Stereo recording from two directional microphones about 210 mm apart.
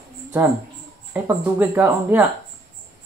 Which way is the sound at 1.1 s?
10° right (ahead or behind).